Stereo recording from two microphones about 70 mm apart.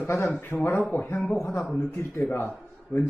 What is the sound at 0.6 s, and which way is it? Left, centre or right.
Speech, left.